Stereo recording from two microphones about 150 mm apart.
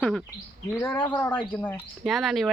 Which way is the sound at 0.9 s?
30° left (ahead or behind).